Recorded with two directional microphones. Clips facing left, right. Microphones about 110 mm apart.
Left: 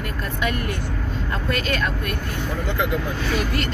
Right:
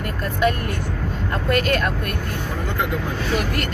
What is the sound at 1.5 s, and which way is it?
Speech, 55° right (ahead or behind).